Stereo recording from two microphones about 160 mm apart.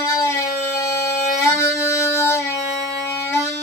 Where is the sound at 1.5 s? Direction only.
15° left (ahead or behind).